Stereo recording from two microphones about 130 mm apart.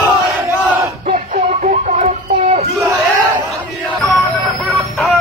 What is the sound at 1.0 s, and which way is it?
Music, 65° right (ahead or behind).